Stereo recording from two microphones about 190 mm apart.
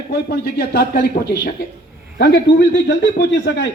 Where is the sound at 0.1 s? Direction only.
55° left (ahead or behind).